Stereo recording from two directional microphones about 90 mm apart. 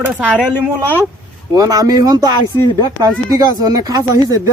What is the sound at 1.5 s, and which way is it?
Speech, 40° right (ahead or behind).